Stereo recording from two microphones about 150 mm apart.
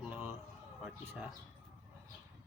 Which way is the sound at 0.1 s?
15° right (ahead or behind).